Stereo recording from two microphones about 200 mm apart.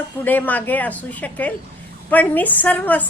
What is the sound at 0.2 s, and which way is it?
A woman's voice, 10° left (ahead or behind).